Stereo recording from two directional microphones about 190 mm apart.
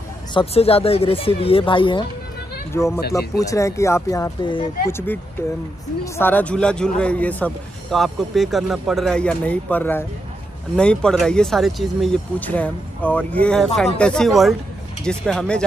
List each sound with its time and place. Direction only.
0.3 s speech: 30° left (ahead or behind)
3.1 s speech: 15° left (ahead or behind)
4.8 s a man's voice: 10° left (ahead or behind)